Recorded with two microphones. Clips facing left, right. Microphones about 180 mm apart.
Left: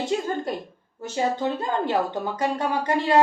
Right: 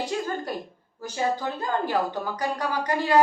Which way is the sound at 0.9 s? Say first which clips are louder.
Left 2 dB; 25° left (ahead or behind).